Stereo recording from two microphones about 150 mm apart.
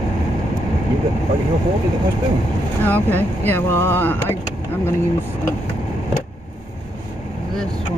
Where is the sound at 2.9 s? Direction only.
15° left (ahead or behind).